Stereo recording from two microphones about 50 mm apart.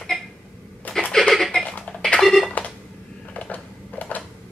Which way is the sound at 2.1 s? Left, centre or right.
Centre.